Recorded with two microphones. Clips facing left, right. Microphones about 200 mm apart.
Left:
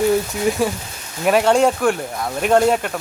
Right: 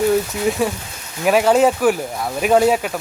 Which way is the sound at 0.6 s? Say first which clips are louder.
Even; centre (ahead or behind).